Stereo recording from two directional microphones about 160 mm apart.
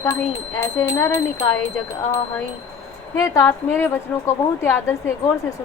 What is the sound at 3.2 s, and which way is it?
A woman's voice, 15° left (ahead or behind).